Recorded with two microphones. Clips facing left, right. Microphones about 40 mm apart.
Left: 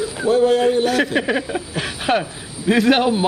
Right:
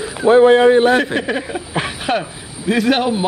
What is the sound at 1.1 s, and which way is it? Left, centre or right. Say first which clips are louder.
Speech: even; centre.